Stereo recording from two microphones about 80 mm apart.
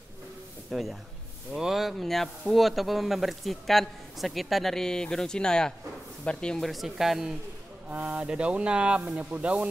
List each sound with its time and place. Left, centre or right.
0.7 s speech: centre
7.9 s speech: centre